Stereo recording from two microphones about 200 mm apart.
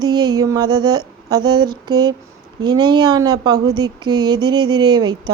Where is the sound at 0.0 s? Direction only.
20° right (ahead or behind).